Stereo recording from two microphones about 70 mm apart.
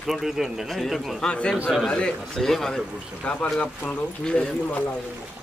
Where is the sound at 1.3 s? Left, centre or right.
Centre.